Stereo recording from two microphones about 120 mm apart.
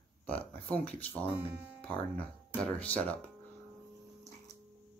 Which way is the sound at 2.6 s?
10° left (ahead or behind).